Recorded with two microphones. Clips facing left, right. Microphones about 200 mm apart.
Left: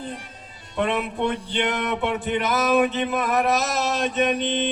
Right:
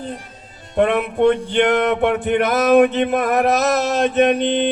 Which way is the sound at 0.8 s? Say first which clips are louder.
Right 8 dB; 50° right (ahead or behind).